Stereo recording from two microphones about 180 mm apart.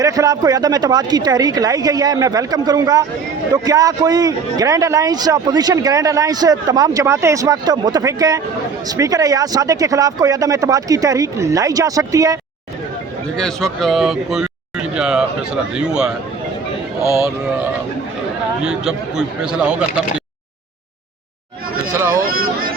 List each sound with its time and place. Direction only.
0.0 s a man's voice: 20° right (ahead or behind)
13.3 s speech: 5° left (ahead or behind)
18.6 s speech: 5° right (ahead or behind)
21.9 s speech: 15° right (ahead or behind)
22.3 s a sound: 55° right (ahead or behind)